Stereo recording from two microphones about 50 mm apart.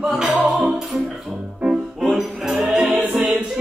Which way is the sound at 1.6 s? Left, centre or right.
Centre.